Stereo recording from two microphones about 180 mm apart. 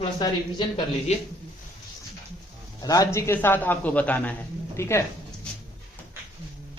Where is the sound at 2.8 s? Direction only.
20° left (ahead or behind).